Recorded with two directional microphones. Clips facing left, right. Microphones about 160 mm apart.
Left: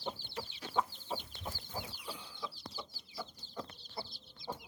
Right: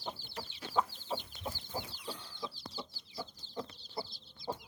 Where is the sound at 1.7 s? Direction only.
25° right (ahead or behind).